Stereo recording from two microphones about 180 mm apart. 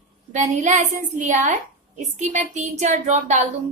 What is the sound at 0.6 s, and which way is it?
A woman's voice, 40° right (ahead or behind).